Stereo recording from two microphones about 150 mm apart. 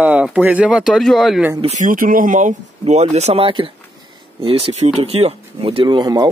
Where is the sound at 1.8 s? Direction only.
65° right (ahead or behind).